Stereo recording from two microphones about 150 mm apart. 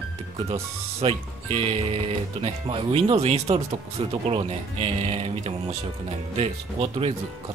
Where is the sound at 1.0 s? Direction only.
40° right (ahead or behind).